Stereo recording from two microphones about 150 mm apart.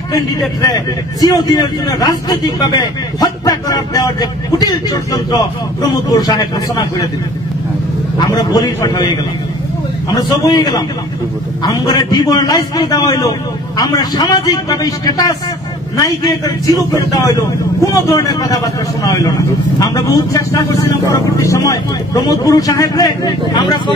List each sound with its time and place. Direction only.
0.1 s a man's voice: 25° left (ahead or behind)
8.3 s a man's voice: 25° left (ahead or behind)